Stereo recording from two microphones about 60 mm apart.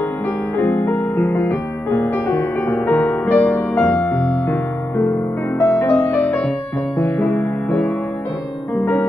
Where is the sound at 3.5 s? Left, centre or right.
Centre.